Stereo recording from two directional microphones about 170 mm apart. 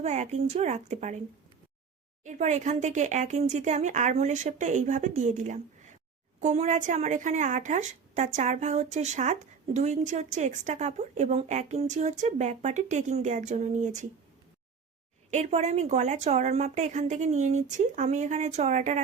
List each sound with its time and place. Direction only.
0.0 s speech: 40° right (ahead or behind)
2.2 s a woman's voice: 45° right (ahead or behind)
15.3 s a woman's voice: 40° right (ahead or behind)